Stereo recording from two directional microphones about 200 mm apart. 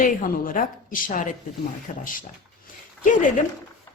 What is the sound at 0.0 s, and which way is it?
A woman's voice, 40° left (ahead or behind).